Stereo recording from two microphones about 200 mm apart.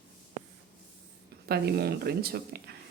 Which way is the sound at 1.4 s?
50° right (ahead or behind).